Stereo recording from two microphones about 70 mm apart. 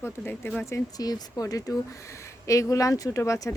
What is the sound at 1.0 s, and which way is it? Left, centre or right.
A woman's voice, left.